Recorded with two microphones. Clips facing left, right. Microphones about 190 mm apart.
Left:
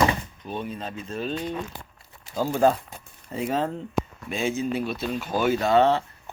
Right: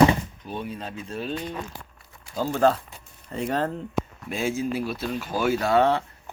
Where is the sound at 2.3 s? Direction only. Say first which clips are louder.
Left 1 dB; 10° left (ahead or behind).